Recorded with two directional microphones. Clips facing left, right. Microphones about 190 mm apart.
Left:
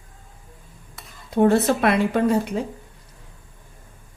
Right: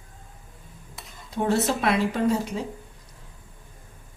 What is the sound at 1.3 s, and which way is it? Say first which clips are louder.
A woman's voice: left 6 dB; 55° left (ahead or behind).